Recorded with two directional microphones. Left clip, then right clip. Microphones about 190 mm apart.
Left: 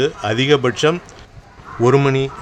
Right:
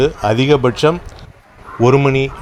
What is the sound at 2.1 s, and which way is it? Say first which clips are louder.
Speech: right 3 dB; 20° left (ahead or behind).